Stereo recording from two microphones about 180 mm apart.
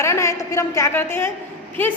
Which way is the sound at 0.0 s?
15° left (ahead or behind).